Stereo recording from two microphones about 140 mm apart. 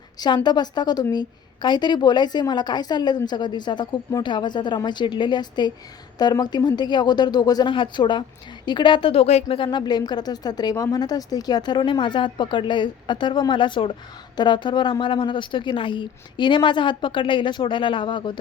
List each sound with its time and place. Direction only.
0.2 s a woman's voice: 30° left (ahead or behind)